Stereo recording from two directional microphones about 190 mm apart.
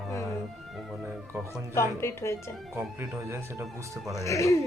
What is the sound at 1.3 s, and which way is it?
Speech, 10° right (ahead or behind).